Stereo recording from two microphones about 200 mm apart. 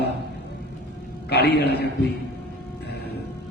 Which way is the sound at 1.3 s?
55° left (ahead or behind).